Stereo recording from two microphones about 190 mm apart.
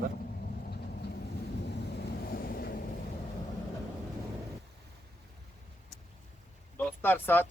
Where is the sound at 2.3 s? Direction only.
50° left (ahead or behind).